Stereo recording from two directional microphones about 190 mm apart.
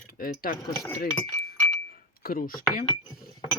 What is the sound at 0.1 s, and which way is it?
Speech, 50° left (ahead or behind).